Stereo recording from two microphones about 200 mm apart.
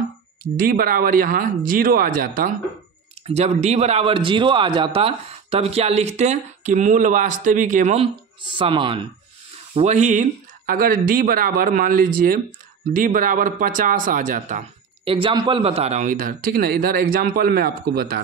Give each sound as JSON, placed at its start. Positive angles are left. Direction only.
{"t": 0.6, "sound": "a man's voice", "side_deg": -45}